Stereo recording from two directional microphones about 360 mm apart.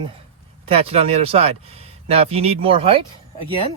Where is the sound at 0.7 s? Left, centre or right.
Centre.